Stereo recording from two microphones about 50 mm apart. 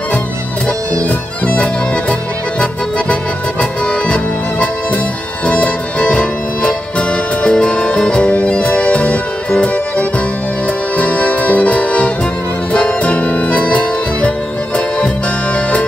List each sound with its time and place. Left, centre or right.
1.0 s music: left
3.8 s music: centre
11.0 s accordion: left
12.7 s music: left